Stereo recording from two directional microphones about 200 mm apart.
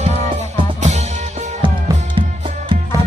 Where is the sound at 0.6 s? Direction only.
35° right (ahead or behind).